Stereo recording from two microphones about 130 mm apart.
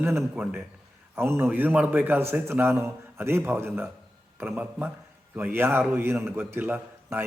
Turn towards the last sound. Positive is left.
turn(degrees=-15)  # may be behind; listen again after turning